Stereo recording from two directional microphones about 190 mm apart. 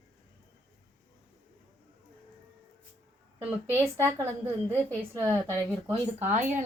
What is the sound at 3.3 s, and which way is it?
A woman's voice, 10° right (ahead or behind).